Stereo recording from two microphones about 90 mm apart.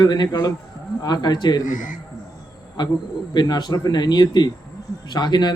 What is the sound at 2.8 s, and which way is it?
A man's voice, 55° left (ahead or behind).